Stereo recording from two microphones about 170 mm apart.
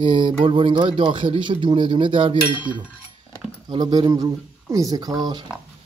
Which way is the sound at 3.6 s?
25° right (ahead or behind).